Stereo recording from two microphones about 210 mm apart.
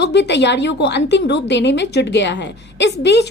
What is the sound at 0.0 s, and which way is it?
A woman's voice, 55° left (ahead or behind).